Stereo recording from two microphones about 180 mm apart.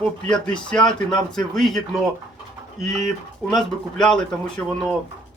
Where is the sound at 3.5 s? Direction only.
Centre (ahead or behind).